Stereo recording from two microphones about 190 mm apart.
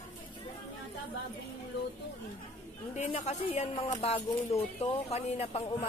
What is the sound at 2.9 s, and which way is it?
Speech, 35° left (ahead or behind).